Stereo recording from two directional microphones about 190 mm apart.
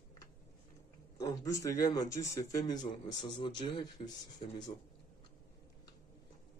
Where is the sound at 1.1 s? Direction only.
15° left (ahead or behind).